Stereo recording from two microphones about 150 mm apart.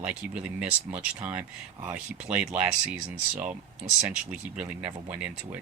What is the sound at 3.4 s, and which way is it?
Speech, 60° right (ahead or behind).